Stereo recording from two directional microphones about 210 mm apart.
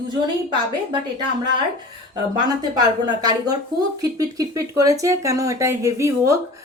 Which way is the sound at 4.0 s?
15° right (ahead or behind).